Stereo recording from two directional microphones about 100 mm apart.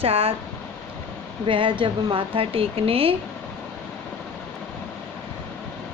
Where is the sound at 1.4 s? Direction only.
55° right (ahead or behind); by 3.1 s 70° right (ahead or behind).